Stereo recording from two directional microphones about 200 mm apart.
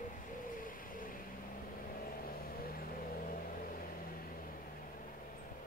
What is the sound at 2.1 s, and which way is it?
Vehicle, 45° left (ahead or behind).